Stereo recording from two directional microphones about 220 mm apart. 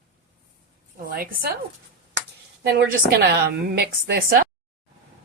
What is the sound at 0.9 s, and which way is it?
Speech, 40° right (ahead or behind).